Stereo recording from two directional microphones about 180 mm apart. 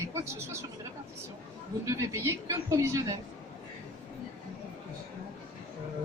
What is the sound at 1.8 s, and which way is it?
A woman's voice, 15° right (ahead or behind).